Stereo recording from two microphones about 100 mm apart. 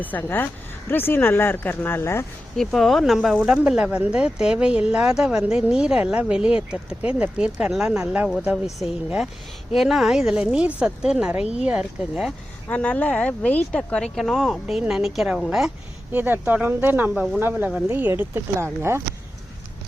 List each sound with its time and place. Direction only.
0.0 s speech: 20° left (ahead or behind)
2.6 s speech: centre (ahead or behind)
12.6 s speech: 15° left (ahead or behind); by 15.7 s 5° right (ahead or behind)
16.1 s speech: 20° right (ahead or behind)
17.9 s speech: 20° right (ahead or behind)